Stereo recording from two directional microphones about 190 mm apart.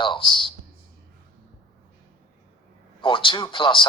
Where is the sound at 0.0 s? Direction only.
25° left (ahead or behind).